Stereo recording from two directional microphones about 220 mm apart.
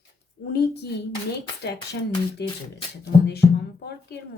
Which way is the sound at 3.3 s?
50° left (ahead or behind).